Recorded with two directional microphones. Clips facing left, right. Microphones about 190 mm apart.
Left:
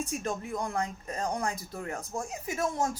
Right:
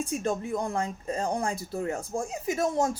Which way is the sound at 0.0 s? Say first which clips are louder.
Right 4 dB; 30° right (ahead or behind).